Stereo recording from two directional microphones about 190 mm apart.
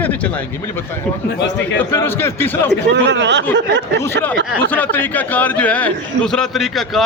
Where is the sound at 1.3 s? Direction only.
65° left (ahead or behind).